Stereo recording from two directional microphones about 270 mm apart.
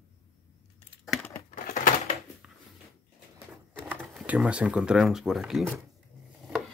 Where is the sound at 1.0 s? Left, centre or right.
Centre.